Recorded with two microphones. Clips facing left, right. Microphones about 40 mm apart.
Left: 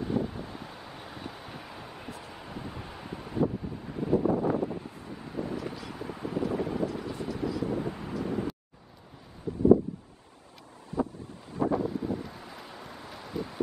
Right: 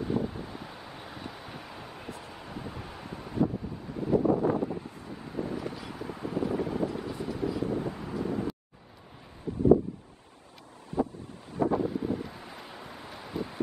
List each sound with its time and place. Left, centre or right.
0.0 s wind: centre
4.6 s wind noise: centre
4.9 s vehicle: centre
10.9 s wind noise: right
11.7 s wind: centre